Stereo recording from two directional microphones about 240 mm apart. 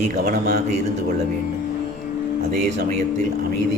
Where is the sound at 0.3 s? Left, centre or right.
Right.